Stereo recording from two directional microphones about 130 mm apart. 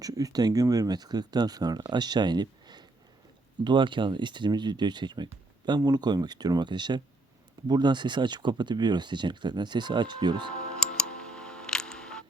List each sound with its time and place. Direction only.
0.0 s speech: 25° right (ahead or behind)
10.5 s music: 5° left (ahead or behind)